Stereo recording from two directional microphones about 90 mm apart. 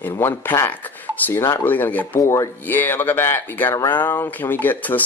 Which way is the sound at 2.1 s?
30° left (ahead or behind).